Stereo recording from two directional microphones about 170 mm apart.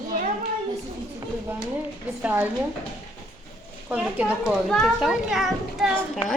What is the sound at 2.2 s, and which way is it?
Speech, 10° right (ahead or behind).